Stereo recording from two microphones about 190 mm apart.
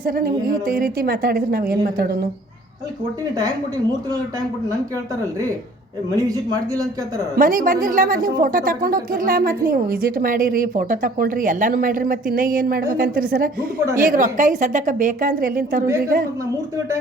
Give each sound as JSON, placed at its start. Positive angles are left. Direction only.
{"t": 0.0, "sound": "a woman's voice", "side_deg": -50}
{"t": 6.2, "sound": "speech", "side_deg": -20}
{"t": 7.3, "sound": "a woman's voice", "side_deg": -45}